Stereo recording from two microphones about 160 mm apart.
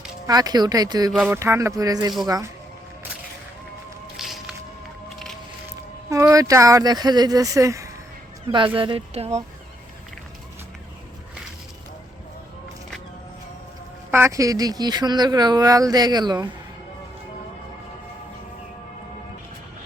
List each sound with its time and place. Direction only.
0.3 s speech: 25° right (ahead or behind)
4.2 s a sound: centre (ahead or behind)
5.0 s music: centre (ahead or behind)
6.1 s speech: 20° right (ahead or behind)
8.5 s speech: 30° right (ahead or behind)
14.1 s speech: 15° right (ahead or behind)